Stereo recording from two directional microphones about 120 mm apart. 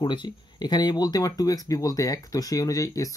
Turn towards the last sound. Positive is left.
turn(degrees=30)  # may be behind; listen again after turning